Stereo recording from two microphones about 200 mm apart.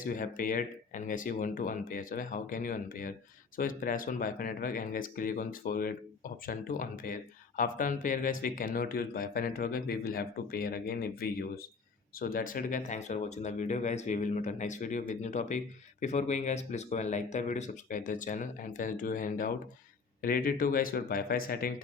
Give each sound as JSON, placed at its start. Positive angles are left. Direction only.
{"t": 0.0, "sound": "speech", "side_deg": 45}